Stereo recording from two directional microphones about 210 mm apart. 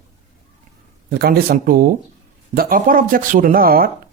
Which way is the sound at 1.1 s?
45° right (ahead or behind).